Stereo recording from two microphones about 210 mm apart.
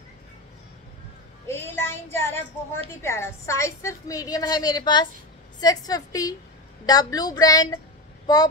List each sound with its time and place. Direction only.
1.5 s a woman's voice: 10° left (ahead or behind)